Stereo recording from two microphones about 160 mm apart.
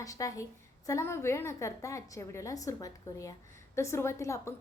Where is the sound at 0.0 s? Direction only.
20° left (ahead or behind).